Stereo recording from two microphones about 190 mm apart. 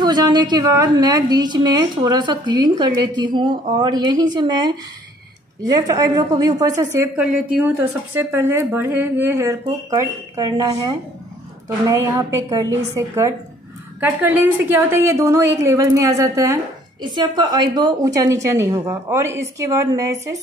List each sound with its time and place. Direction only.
0.0 s a woman's voice: 20° right (ahead or behind)